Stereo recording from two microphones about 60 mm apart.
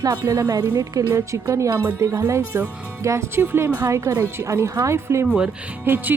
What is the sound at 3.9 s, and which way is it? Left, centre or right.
Speech, right.